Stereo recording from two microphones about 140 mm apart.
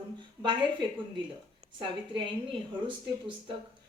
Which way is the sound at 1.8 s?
35° right (ahead or behind).